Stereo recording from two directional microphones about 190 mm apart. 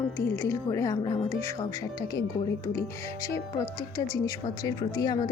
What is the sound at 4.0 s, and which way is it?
Speech, 20° left (ahead or behind).